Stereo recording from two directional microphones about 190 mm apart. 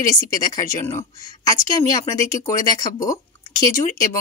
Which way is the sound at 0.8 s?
15° left (ahead or behind).